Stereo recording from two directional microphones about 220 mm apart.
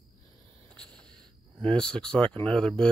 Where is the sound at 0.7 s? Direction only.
5° left (ahead or behind).